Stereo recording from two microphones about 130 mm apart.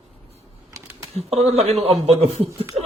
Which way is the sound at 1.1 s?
50° right (ahead or behind).